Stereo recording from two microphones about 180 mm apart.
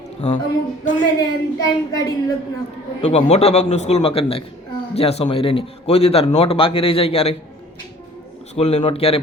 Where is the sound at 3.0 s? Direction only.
35° left (ahead or behind).